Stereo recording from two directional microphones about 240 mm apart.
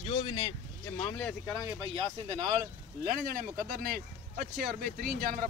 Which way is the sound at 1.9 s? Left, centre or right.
Right.